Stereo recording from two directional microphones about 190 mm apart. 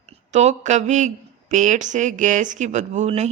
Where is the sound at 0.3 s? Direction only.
40° right (ahead or behind).